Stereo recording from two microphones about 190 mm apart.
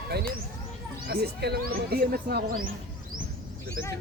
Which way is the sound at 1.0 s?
55° right (ahead or behind).